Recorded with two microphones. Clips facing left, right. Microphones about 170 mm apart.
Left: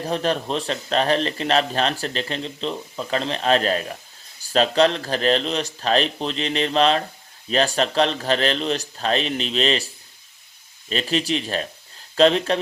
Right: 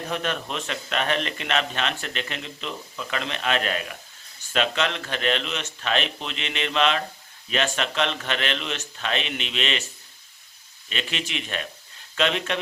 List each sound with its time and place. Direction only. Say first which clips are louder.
0.0 s a man's voice: left 6 dB; 35° left (ahead or behind)